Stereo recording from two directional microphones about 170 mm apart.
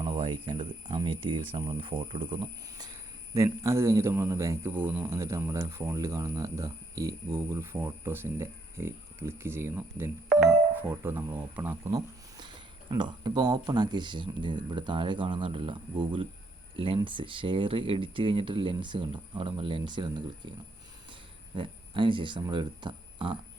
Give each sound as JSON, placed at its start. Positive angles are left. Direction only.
{"t": 0.0, "sound": "speech", "side_deg": -30}